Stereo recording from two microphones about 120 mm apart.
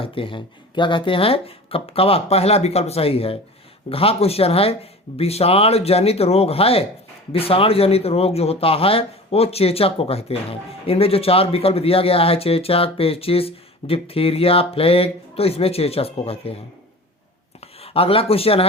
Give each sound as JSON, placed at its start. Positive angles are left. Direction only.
{"t": 0.0, "sound": "speech", "side_deg": 50}
{"t": 17.6, "sound": "speech", "side_deg": 55}